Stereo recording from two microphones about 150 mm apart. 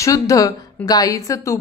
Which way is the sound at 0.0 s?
20° left (ahead or behind).